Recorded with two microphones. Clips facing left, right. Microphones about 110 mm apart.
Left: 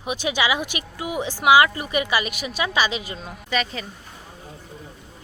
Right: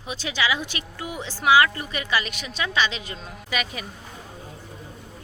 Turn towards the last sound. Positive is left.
turn(degrees=-10)  # may be behind; listen again after turning